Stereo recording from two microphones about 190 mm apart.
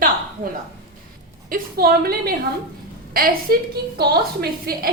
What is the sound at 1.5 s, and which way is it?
A woman's voice, 50° right (ahead or behind).